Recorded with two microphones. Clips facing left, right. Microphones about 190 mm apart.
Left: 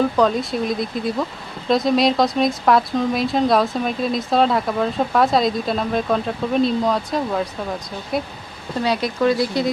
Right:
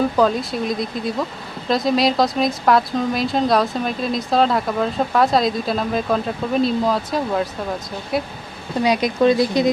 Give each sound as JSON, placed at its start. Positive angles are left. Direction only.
{"t": 0.2, "sound": "speech", "side_deg": 0}
{"t": 8.8, "sound": "speech", "side_deg": -15}